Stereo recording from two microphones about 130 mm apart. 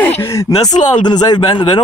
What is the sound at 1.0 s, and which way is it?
Speech, 30° left (ahead or behind).